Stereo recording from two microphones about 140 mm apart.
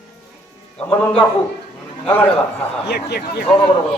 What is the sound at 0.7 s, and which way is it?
A man's voice, 10° left (ahead or behind).